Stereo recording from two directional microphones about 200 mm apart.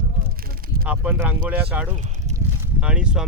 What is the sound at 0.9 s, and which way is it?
Speech, 10° right (ahead or behind).